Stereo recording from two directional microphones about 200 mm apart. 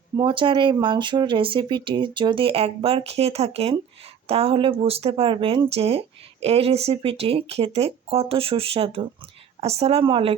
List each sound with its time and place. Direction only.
0.2 s speech: 25° right (ahead or behind)